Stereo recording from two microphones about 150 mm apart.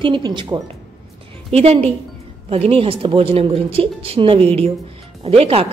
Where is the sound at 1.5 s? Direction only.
40° right (ahead or behind).